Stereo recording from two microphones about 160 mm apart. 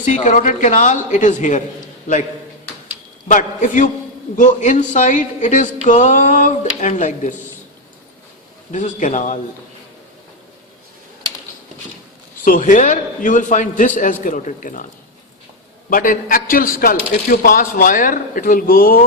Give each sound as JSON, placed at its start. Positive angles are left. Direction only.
{"t": 0.0, "sound": "a man's voice", "side_deg": 50}
{"t": 3.2, "sound": "a man's voice", "side_deg": 50}
{"t": 8.7, "sound": "a man's voice", "side_deg": 50}
{"t": 12.5, "sound": "a man's voice", "side_deg": 55}
{"t": 15.9, "sound": "a man's voice", "side_deg": 60}